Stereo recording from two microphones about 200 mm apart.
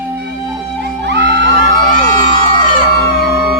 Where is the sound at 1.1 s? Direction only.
60° right (ahead or behind).